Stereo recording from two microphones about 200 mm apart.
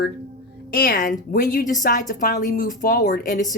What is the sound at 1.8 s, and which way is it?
A woman's voice, 40° left (ahead or behind).